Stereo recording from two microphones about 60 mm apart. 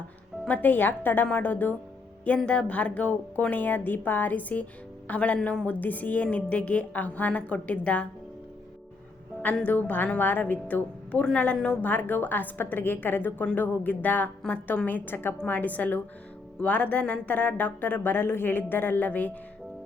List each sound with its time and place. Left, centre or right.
0.4 s a woman's voice: left
2.5 s speech: left
9.6 s a woman's voice: left
15.4 s speech: left